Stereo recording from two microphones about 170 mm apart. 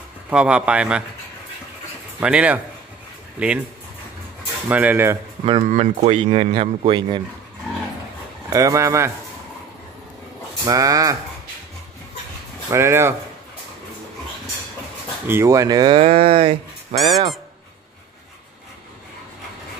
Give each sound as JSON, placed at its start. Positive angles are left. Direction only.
{"t": 0.3, "sound": "a man's voice", "side_deg": -5}
{"t": 2.1, "sound": "a man's voice", "side_deg": -5}
{"t": 4.6, "sound": "a man's voice", "side_deg": -10}
{"t": 5.4, "sound": "speech", "side_deg": -30}
{"t": 8.5, "sound": "a man's voice", "side_deg": -20}
{"t": 10.6, "sound": "speech", "side_deg": -20}
{"t": 12.6, "sound": "a man's voice", "side_deg": -15}
{"t": 15.2, "sound": "speech", "side_deg": -15}